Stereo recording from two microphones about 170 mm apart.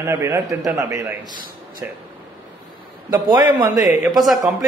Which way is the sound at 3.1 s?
25° right (ahead or behind).